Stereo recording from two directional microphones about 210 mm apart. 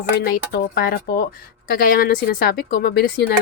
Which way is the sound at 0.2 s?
45° left (ahead or behind).